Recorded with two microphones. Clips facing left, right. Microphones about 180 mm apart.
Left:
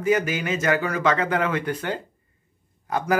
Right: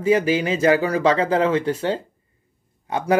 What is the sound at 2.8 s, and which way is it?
Speech, 25° right (ahead or behind).